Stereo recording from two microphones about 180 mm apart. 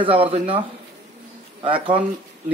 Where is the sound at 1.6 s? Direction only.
30° right (ahead or behind).